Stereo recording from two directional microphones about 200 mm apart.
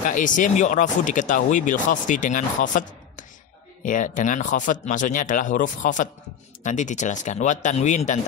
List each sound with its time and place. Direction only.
0.0 s speech: 40° left (ahead or behind)